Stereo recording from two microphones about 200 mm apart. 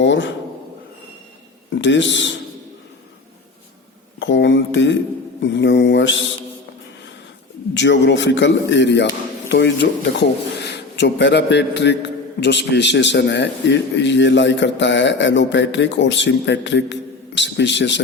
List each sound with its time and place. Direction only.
0.0 s speech: 65° left (ahead or behind)
1.8 s a man's voice: 65° left (ahead or behind)
4.2 s a man's voice: 65° left (ahead or behind)
7.7 s a man's voice: 65° left (ahead or behind)